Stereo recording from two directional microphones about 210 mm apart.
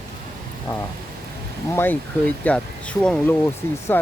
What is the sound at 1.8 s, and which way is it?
Speech, 10° left (ahead or behind).